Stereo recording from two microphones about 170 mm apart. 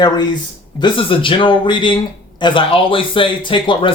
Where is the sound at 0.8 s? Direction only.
30° left (ahead or behind).